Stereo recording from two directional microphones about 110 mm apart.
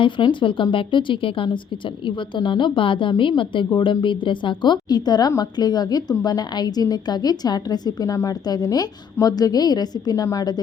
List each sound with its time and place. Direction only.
0.0 s a woman's voice: 50° left (ahead or behind)